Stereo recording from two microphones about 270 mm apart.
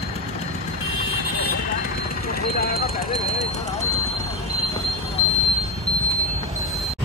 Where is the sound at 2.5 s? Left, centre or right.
Left.